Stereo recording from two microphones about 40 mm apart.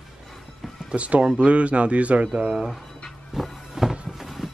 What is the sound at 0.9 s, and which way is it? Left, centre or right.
A man's voice, right.